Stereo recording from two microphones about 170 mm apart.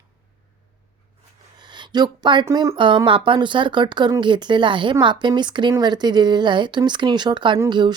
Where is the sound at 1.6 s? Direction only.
25° right (ahead or behind).